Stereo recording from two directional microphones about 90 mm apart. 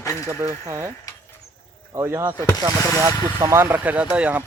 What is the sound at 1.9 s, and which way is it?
Speech, 30° right (ahead or behind).